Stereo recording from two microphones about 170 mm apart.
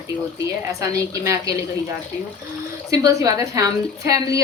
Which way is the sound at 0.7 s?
20° right (ahead or behind).